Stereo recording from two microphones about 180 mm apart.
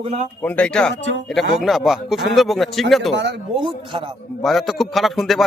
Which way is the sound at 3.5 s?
30° right (ahead or behind).